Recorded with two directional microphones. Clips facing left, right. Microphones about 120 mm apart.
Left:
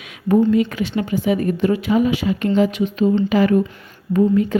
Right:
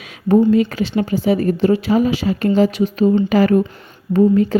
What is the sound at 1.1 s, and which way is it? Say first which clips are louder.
Speech: right 2 dB; 35° right (ahead or behind).